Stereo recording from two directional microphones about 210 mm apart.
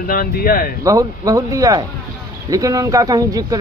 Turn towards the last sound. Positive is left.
turn(degrees=-15)  # may be behind; listen again after turning